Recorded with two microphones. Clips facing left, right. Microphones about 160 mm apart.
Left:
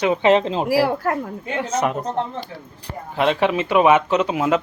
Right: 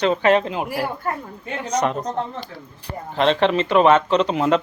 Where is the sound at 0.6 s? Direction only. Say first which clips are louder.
Left 7 dB; 90° left.